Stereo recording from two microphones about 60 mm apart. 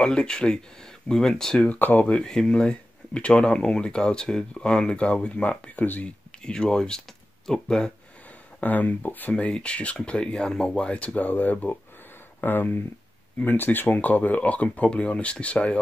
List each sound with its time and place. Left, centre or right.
0.0 s speech: centre
1.7 s speech: left
2.2 s speech: centre
5.8 s speech: left
6.4 s speech: centre
8.5 s speech: left
9.3 s speech: centre